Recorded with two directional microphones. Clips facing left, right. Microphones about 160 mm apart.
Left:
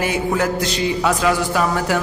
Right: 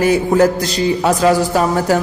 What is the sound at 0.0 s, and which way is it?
A man's voice, 40° right (ahead or behind).